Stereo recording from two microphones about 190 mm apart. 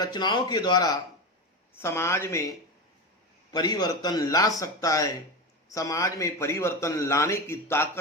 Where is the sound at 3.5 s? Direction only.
20° left (ahead or behind).